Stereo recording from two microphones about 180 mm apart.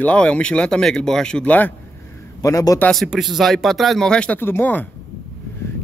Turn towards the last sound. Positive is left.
turn(degrees=10)  # may be behind; listen again after turning